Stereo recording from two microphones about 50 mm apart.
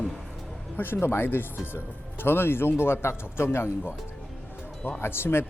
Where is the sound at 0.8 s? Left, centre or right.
Left.